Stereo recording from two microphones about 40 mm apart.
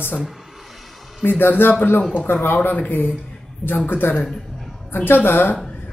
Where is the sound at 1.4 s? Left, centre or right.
Left.